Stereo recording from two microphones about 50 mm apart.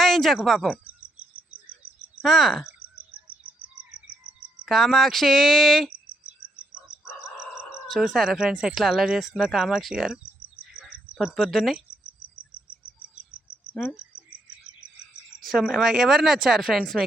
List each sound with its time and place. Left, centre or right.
0.0 s a sound: centre
0.4 s speech: centre
0.7 s cricket: right
2.2 s speech: centre
2.6 s bird: right
4.7 s speech: centre
7.9 s speech: centre
9.4 s speech: centre
10.6 s bird: centre
11.3 s speech: centre
13.8 s frog: centre
15.4 s a sound: centre
15.6 s speech: centre